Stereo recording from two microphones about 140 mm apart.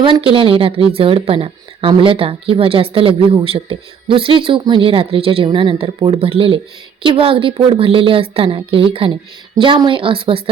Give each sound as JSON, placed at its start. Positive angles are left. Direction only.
{"t": 0.0, "sound": "a woman's voice", "side_deg": -40}